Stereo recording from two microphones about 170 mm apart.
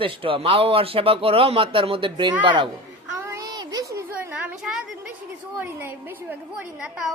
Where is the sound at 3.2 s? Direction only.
20° right (ahead or behind).